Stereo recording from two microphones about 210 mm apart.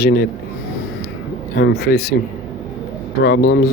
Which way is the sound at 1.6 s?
55° left (ahead or behind).